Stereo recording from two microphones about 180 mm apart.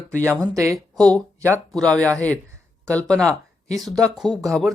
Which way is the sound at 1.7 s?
5° left (ahead or behind).